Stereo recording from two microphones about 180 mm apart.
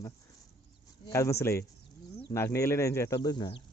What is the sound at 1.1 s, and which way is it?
Speech, 15° left (ahead or behind).